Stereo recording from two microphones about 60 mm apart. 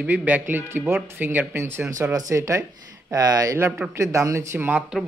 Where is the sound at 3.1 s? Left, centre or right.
Right.